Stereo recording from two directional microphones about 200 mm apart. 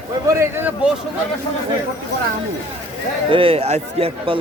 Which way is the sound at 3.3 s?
25° right (ahead or behind).